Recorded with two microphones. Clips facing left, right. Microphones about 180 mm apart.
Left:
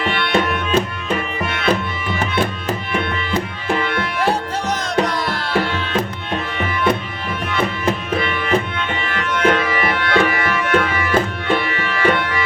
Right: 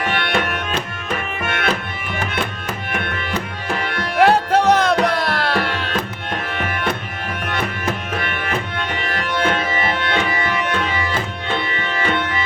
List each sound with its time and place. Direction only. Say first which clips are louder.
0.0 s music: left 1 dB; 45° right (ahead or behind)
1.4 s music: left 1 dB; 50° right (ahead or behind)
4.2 s music: right 9 dB; 60° right (ahead or behind)
6.5 s music: left 1 dB; 50° right (ahead or behind)
8.2 s music: left 3 dB; 45° right (ahead or behind)
9.0 s tabla: left 4 dB; 35° right (ahead or behind)